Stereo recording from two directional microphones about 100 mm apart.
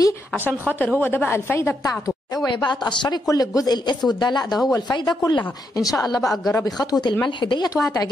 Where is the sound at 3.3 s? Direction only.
35° left (ahead or behind).